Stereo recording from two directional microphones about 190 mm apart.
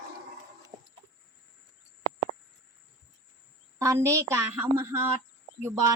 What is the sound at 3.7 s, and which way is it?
A woman's voice, 15° right (ahead or behind).